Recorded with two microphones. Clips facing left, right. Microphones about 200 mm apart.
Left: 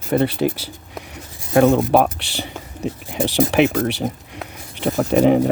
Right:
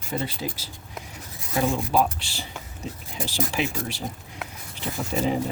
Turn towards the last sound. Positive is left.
turn(degrees=65)  # may be behind; listen again after turning